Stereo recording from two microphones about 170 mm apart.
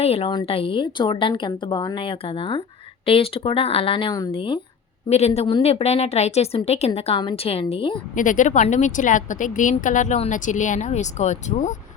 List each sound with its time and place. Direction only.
0.0 s a woman's voice: 35° left (ahead or behind)
8.1 s speech: 50° left (ahead or behind)